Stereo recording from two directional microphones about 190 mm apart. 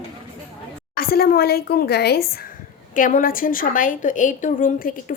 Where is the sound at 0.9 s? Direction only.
50° left (ahead or behind).